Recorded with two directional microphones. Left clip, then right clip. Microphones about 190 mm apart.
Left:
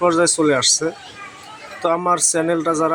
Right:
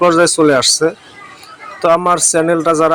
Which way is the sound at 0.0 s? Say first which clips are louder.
Right 6 dB; 25° right (ahead or behind).